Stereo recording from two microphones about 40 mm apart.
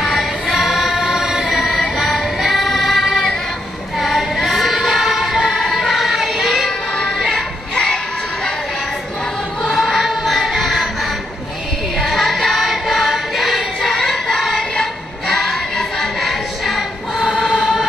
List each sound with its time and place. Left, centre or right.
0.0 s music: centre
4.0 s choir: centre
7.2 s music: centre
7.7 s music: left
9.8 s music: centre
12.0 s music: centre
13.7 s music: centre